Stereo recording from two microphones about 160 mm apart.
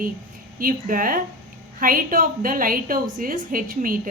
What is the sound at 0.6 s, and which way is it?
A woman's voice, 60° right (ahead or behind).